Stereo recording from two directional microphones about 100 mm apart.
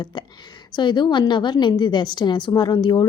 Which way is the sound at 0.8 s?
50° left (ahead or behind).